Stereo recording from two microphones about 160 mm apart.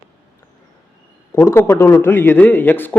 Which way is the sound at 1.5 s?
20° left (ahead or behind).